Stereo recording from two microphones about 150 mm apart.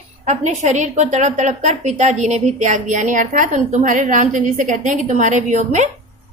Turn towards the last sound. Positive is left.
turn(degrees=-50)  # may be behind; listen again after turning